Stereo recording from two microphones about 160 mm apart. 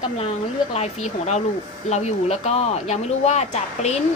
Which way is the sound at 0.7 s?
45° left (ahead or behind).